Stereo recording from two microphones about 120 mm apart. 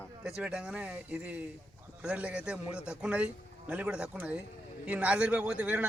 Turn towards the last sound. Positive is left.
turn(degrees=-10)  # may be behind; listen again after turning